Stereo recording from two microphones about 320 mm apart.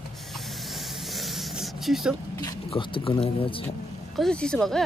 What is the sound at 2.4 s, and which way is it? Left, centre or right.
Speech, centre.